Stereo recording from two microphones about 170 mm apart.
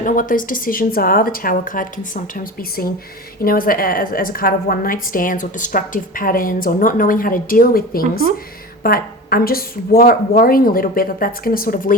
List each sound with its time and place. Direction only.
0.0 s a woman's voice: 50° left (ahead or behind)